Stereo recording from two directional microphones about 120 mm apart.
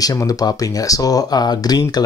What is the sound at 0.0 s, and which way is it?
Speech, 30° left (ahead or behind).